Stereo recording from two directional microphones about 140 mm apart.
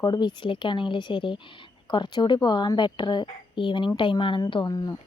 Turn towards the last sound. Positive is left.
turn(degrees=30)  # may be behind; listen again after turning